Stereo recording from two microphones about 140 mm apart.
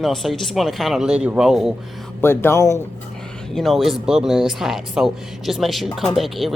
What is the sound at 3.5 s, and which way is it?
Speech, centre (ahead or behind).